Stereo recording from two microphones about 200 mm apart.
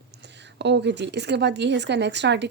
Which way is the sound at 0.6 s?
60° right (ahead or behind).